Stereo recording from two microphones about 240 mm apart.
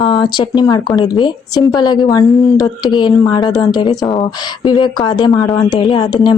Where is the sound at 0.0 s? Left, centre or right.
Centre.